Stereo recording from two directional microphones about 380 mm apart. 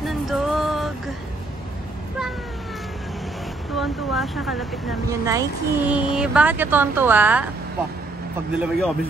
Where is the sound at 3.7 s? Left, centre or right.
Centre.